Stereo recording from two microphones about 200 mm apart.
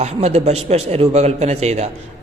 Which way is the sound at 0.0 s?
30° right (ahead or behind).